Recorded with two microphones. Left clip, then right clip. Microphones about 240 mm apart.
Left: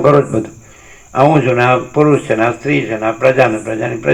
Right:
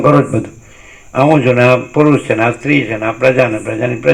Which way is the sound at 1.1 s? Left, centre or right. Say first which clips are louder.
Right 1 dB; right.